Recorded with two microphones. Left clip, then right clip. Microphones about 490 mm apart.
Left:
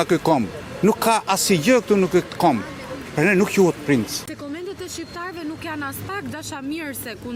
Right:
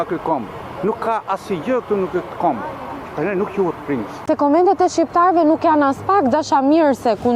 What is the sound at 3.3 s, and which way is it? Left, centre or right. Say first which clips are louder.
Speech: left 2 dB; left.